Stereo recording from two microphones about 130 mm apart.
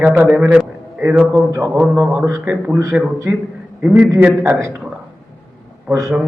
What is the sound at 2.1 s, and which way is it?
Speech, 20° right (ahead or behind).